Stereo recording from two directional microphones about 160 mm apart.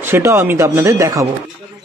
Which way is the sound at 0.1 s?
15° right (ahead or behind).